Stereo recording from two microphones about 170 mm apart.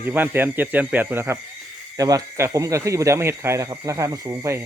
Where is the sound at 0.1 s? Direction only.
10° right (ahead or behind).